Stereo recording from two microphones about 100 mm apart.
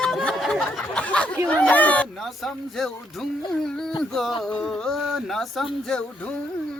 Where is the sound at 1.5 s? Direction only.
15° left (ahead or behind).